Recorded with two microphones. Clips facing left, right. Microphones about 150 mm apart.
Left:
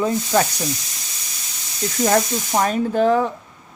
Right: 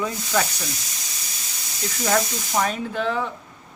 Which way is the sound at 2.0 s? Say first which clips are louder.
Left 5 dB; 40° left (ahead or behind).